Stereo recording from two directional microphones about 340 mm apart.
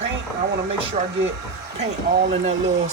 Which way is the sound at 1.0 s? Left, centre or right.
Centre.